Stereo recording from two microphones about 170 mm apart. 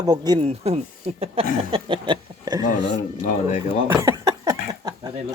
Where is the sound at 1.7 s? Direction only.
30° right (ahead or behind).